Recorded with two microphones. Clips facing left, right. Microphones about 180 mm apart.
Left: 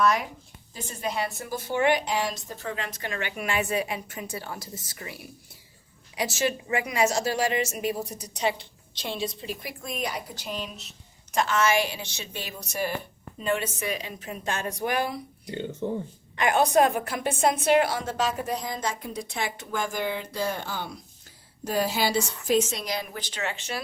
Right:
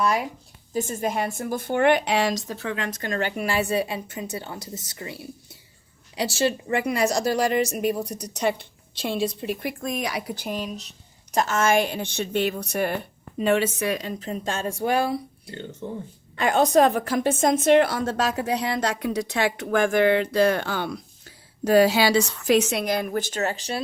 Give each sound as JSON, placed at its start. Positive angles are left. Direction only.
{"t": 0.7, "sound": "a woman's voice", "side_deg": -45}
{"t": 3.1, "sound": "a woman's voice", "side_deg": -40}
{"t": 6.7, "sound": "a woman's voice", "side_deg": -50}
{"t": 10.4, "sound": "a woman's voice", "side_deg": -45}
{"t": 13.4, "sound": "a woman's voice", "side_deg": -85}
{"t": 14.2, "sound": "speech", "side_deg": -35}
{"t": 15.4, "sound": "speech", "side_deg": 15}
{"t": 17.0, "sound": "a woman's voice", "side_deg": -40}